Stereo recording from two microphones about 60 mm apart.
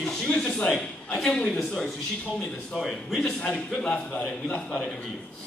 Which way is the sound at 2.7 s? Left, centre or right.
Centre.